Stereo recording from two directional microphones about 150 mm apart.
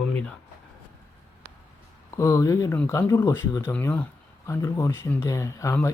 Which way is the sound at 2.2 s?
20° left (ahead or behind).